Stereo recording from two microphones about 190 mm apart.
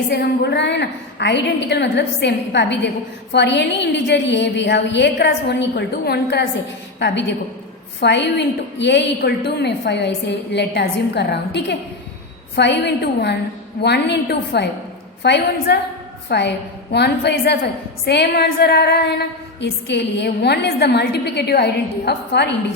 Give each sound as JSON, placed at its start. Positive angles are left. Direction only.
{"t": 0.1, "sound": "a woman's voice", "side_deg": 65}